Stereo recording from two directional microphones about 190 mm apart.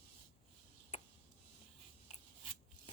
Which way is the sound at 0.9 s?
35° left (ahead or behind).